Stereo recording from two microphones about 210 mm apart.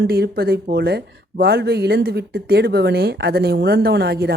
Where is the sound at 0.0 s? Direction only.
50° right (ahead or behind).